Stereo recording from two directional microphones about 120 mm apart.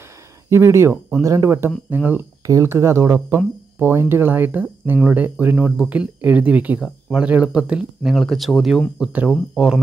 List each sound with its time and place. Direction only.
0.5 s speech: 20° right (ahead or behind); by 8.8 s centre (ahead or behind)
9.0 s speech: 10° right (ahead or behind)